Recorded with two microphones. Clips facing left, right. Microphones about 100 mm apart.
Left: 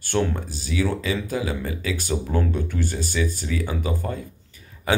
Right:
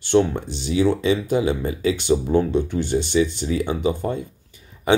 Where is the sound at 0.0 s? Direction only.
20° right (ahead or behind).